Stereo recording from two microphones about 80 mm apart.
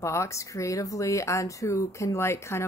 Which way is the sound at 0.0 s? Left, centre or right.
Left.